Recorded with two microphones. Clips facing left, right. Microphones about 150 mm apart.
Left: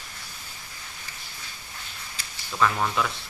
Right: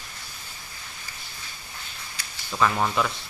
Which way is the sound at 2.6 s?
10° right (ahead or behind).